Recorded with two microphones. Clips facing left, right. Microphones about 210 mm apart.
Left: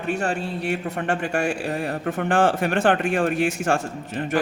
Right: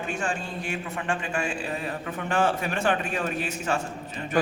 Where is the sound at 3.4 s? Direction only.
90° left.